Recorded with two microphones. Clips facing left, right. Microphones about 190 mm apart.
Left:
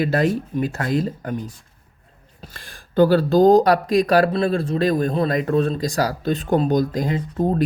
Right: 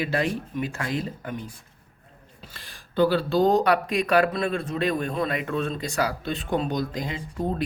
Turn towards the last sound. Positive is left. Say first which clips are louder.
# left 7 dB
turn(degrees=45)  # may be behind; listen again after turning